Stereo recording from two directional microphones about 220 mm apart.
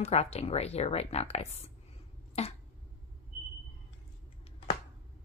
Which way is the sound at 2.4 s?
30° left (ahead or behind).